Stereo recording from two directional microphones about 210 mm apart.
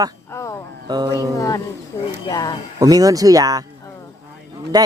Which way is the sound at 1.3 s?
15° left (ahead or behind).